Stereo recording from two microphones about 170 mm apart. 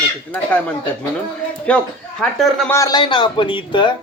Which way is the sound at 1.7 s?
5° left (ahead or behind).